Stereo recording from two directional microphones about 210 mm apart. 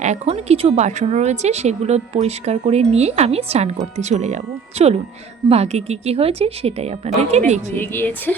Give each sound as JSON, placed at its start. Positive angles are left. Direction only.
{"t": 0.0, "sound": "a woman's voice", "side_deg": -30}
{"t": 7.8, "sound": "a woman's voice", "side_deg": 10}